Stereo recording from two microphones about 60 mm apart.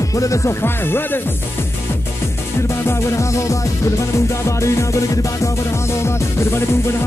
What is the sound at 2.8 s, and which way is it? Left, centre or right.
Music, left.